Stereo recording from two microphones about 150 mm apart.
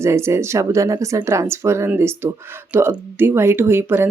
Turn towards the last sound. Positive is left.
turn(degrees=-15)  # may be behind; listen again after turning